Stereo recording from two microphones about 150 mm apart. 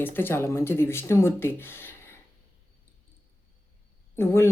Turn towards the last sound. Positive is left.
turn(degrees=15)  # may be behind; listen again after turning